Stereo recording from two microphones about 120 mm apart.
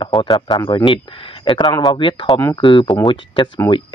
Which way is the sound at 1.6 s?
35° left (ahead or behind).